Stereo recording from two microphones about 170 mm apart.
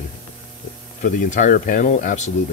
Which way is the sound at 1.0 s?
55° left (ahead or behind).